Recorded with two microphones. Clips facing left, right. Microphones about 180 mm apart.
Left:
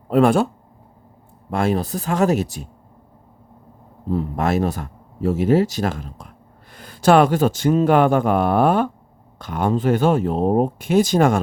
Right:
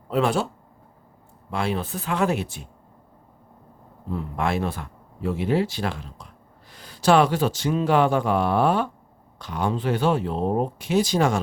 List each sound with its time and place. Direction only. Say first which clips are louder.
0.1 s speech: left 7 dB; 50° left (ahead or behind)
1.5 s speech: left 6 dB; 45° left (ahead or behind)
4.1 s speech: left 5 dB; 40° left (ahead or behind)